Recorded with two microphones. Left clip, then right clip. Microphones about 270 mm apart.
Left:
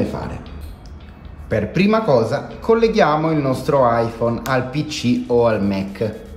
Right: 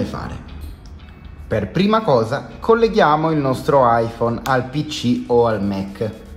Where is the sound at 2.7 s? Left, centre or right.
Centre.